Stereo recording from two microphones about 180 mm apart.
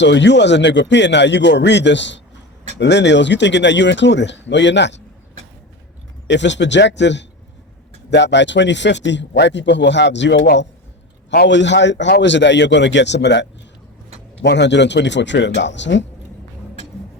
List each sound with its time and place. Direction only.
0.0 s a man's voice: 75° left (ahead or behind)
6.2 s a man's voice: 80° left